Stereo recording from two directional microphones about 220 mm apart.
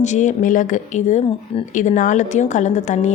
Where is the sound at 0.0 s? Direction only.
35° left (ahead or behind).